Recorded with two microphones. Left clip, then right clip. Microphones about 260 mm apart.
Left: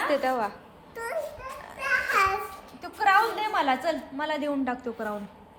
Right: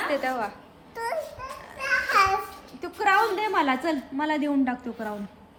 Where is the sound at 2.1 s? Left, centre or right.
Centre.